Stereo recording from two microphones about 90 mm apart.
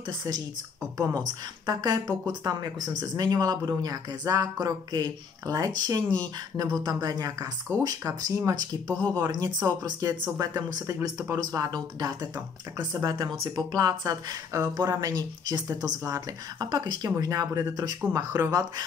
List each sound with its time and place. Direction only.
0.9 s speech: 40° right (ahead or behind)
11.3 s speech: 45° right (ahead or behind)
13.6 s speech: 45° right (ahead or behind)
17.2 s speech: 40° right (ahead or behind)